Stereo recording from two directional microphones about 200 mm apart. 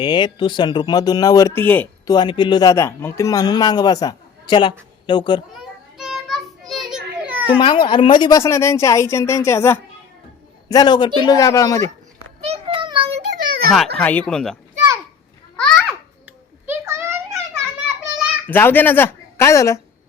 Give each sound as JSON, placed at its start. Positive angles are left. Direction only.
{"t": 0.0, "sound": "a man's voice", "side_deg": 20}
{"t": 2.1, "sound": "a man's voice", "side_deg": 25}
{"t": 5.5, "sound": "children playing", "side_deg": -5}
{"t": 7.6, "sound": "a man's voice", "side_deg": 25}
{"t": 12.4, "sound": "child singing", "side_deg": -30}
{"t": 13.3, "sound": "a sound", "side_deg": -45}
{"t": 13.7, "sound": "speech", "side_deg": 5}
{"t": 15.5, "sound": "babbling", "side_deg": 5}
{"t": 16.6, "sound": "a sound", "side_deg": -15}
{"t": 18.4, "sound": "speech", "side_deg": 10}